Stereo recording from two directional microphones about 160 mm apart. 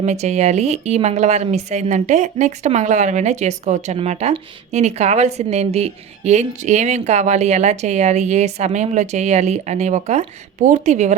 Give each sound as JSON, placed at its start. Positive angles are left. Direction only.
{"t": 0.0, "sound": "a woman's voice", "side_deg": -45}